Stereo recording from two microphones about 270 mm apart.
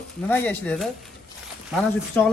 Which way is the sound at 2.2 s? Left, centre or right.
Centre.